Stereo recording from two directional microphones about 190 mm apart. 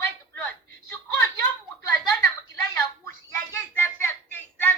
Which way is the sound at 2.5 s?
15° left (ahead or behind).